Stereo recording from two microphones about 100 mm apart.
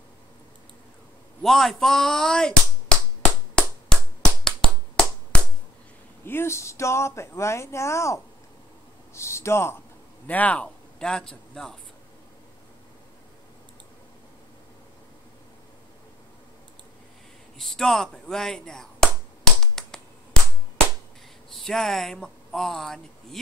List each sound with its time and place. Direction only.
1.4 s speech: centre (ahead or behind)
3.5 s finger snapping: 5° left (ahead or behind)
6.2 s speech: 25° left (ahead or behind)
10.2 s a man's voice: 15° left (ahead or behind)
17.6 s speech: 5° left (ahead or behind)
19.6 s finger snapping: 5° left (ahead or behind)
21.5 s speech: 5° left (ahead or behind)